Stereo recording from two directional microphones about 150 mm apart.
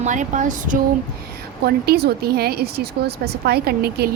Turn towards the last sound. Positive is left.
turn(degrees=-90)